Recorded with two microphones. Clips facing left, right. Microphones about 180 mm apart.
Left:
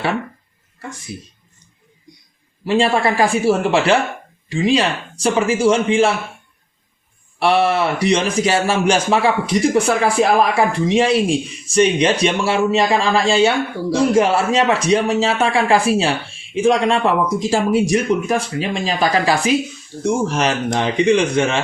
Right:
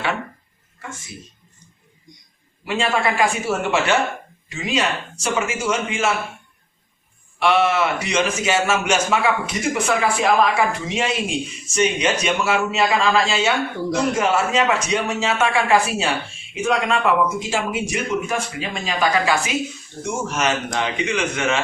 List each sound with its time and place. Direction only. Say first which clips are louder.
2.6 s a man's voice: left 5 dB; 30° left (ahead or behind)
7.3 s a man's voice: left 2 dB; 35° left (ahead or behind)